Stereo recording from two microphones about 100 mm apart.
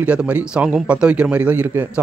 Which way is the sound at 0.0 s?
15° right (ahead or behind).